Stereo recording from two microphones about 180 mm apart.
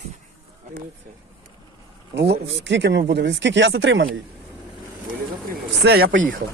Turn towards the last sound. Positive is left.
turn(degrees=-55)  # may be behind; listen again after turning